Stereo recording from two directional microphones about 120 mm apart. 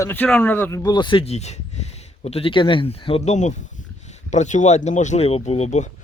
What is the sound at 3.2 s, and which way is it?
Speech, 75° left (ahead or behind).